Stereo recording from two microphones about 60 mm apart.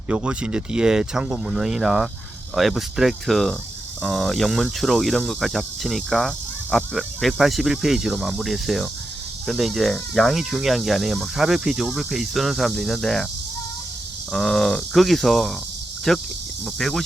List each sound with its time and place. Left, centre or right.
0.1 s speech: right
2.6 s cricket: centre
14.3 s cricket: centre
16.1 s speech: centre
16.6 s cricket: centre